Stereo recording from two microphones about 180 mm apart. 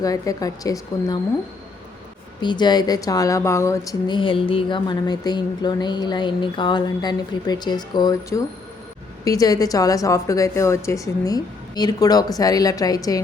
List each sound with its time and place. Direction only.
0.0 s speech: 20° left (ahead or behind)
2.4 s speech: 25° left (ahead or behind)